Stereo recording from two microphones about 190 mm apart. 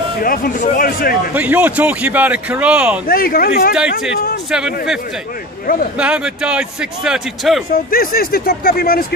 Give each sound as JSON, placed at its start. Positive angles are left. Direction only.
{"t": 0.2, "sound": "speech", "side_deg": 50}
{"t": 1.3, "sound": "speech", "side_deg": -10}
{"t": 3.1, "sound": "speech", "side_deg": 50}
{"t": 4.5, "sound": "a man's voice", "side_deg": -5}
{"t": 5.9, "sound": "a man's voice", "side_deg": -5}
{"t": 7.7, "sound": "speech", "side_deg": 50}